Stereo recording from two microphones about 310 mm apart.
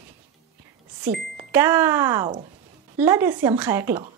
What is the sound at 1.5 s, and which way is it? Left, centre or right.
Speech, centre.